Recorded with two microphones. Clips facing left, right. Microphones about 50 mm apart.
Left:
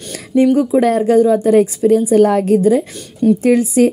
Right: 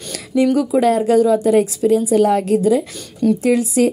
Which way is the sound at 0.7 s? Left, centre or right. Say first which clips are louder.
Left 1 dB; left.